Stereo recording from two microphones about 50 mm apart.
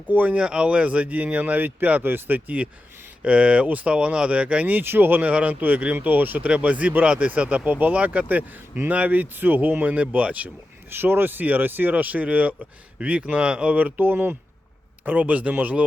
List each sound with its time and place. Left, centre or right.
0.1 s speech: right
0.3 s speech: right
3.2 s speech: right
4.8 s speech: right
5.2 s speech: right
9.9 s speech: right
10.8 s speech: right
13.7 s speech: right
15.0 s speech: right